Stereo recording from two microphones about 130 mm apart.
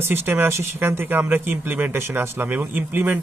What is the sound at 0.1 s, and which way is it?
Speech, 15° right (ahead or behind).